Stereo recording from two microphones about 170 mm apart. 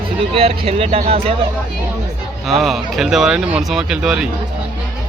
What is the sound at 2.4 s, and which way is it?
Speech, centre (ahead or behind).